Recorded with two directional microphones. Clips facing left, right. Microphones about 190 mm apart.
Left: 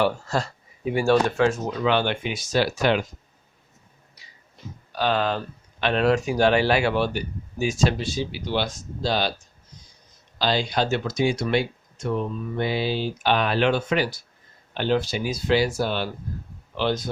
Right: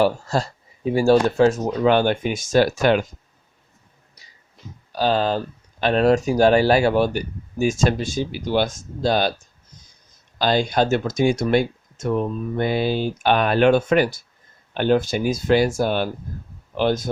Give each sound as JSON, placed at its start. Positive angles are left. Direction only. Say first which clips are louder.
{"t": 0.0, "sound": "speech", "louder": "right 4 dB", "side_deg": -35}
{"t": 4.9, "sound": "speech", "louder": "right 3 dB", "side_deg": -35}
{"t": 10.3, "sound": "speech", "louder": "right 4 dB", "side_deg": -50}